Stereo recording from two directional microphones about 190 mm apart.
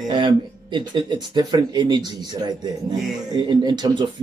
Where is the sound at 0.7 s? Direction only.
25° right (ahead or behind).